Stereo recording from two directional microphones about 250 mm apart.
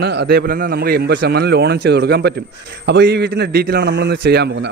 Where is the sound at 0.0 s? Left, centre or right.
Right.